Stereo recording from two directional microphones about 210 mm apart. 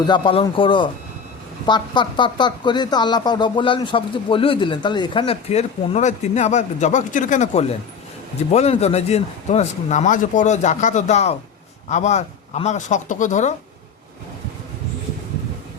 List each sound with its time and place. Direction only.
0.0 s speech: 25° left (ahead or behind)